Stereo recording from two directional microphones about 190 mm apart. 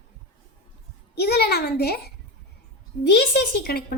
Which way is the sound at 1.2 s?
55° left (ahead or behind).